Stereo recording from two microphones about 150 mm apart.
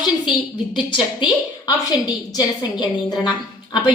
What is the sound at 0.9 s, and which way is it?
A woman's voice, 30° left (ahead or behind).